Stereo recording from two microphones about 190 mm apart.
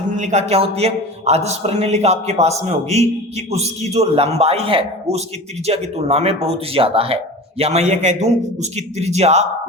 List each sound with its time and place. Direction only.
0.2 s a man's voice: 40° right (ahead or behind)